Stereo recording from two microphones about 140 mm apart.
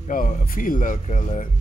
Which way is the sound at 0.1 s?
80° left.